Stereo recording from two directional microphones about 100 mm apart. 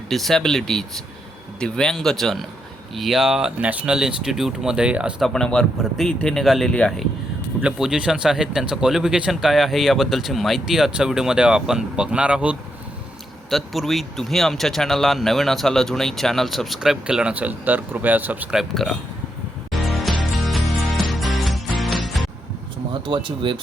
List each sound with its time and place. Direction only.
0.1 s speech: centre (ahead or behind)
5.2 s speech: 5° left (ahead or behind)
7.6 s speech: 10° right (ahead or behind)
13.5 s speech: centre (ahead or behind); by 18.4 s 15° right (ahead or behind)
18.5 s speech: centre (ahead or behind)
19.8 s music: centre (ahead or behind)
22.9 s speech: 55° right (ahead or behind)